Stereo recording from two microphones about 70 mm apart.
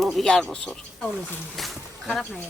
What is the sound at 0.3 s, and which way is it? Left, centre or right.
Speech, centre.